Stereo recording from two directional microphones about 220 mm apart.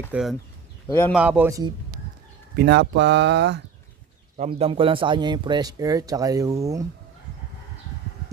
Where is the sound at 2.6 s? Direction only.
50° right (ahead or behind).